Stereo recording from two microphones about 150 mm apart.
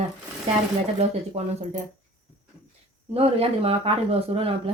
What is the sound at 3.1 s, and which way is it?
Speech, 40° right (ahead or behind).